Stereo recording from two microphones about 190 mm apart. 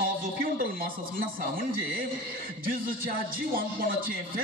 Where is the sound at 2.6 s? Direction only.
50° right (ahead or behind).